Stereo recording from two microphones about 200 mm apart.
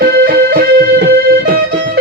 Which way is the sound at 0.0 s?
45° right (ahead or behind).